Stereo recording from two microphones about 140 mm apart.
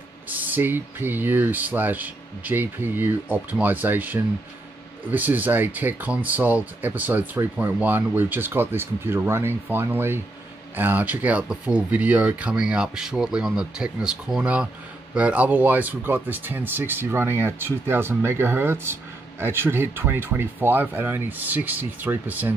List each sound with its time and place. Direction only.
0.3 s speech: 10° right (ahead or behind)